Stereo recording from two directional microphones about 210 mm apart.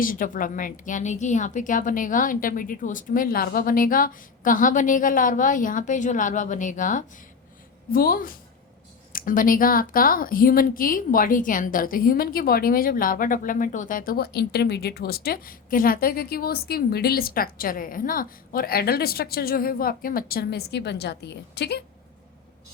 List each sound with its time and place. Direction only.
0.0 s a woman's voice: 40° left (ahead or behind)